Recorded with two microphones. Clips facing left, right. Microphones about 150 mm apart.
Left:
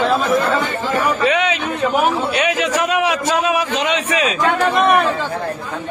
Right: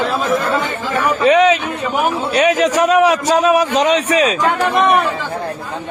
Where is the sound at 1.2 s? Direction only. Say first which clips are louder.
Right 6 dB; 35° right (ahead or behind).